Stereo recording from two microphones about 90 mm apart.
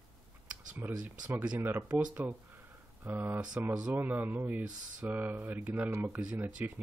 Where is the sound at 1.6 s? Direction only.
20° right (ahead or behind).